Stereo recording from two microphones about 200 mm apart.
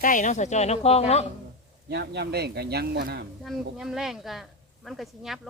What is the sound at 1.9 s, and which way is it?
Speech, 55° right (ahead or behind).